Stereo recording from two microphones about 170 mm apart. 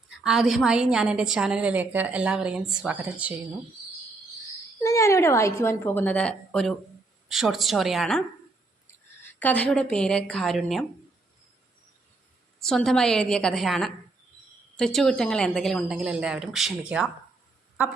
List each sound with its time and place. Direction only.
0.2 s a woman's voice: centre (ahead or behind)
4.8 s a woman's voice: 15° left (ahead or behind); by 8.2 s centre (ahead or behind)
9.4 s a woman's voice: 10° left (ahead or behind)
12.6 s a woman's voice: centre (ahead or behind)